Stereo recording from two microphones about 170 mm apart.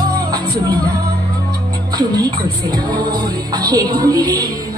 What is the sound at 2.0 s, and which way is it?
Music, 25° right (ahead or behind).